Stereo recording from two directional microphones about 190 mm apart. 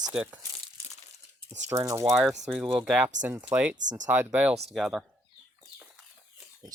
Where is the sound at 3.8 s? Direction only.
40° right (ahead or behind).